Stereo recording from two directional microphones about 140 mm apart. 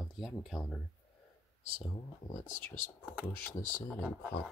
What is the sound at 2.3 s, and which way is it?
Speech, 65° left (ahead or behind).